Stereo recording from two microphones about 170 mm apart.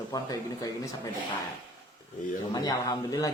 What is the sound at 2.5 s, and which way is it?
Speech, 20° left (ahead or behind).